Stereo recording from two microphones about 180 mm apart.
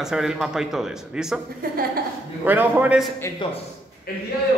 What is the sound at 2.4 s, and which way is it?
Speech, 10° right (ahead or behind).